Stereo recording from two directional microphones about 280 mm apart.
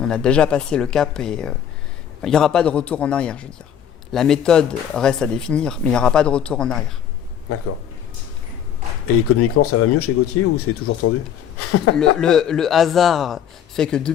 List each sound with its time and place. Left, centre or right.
0.0 s speech: centre
7.5 s speech: left
9.4 s speech: left
11.9 s speech: centre